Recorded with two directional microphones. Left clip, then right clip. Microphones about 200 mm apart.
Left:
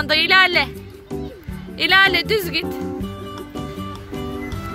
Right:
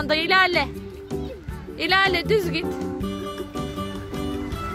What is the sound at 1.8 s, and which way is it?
Speech, 5° right (ahead or behind).